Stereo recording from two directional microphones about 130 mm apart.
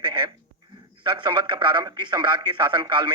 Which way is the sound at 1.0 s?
35° right (ahead or behind).